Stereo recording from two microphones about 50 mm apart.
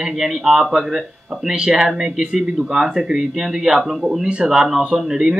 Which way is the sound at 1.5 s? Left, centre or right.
Centre.